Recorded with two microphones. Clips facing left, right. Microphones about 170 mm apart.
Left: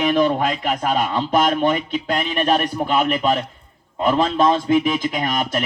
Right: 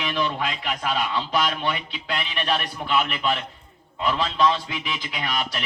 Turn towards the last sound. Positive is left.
turn(degrees=45)  # may be behind; listen again after turning